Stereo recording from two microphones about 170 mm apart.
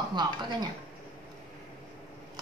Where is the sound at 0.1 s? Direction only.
25° right (ahead or behind).